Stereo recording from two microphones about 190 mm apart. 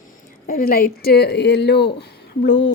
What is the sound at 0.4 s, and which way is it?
Speech, 50° left (ahead or behind).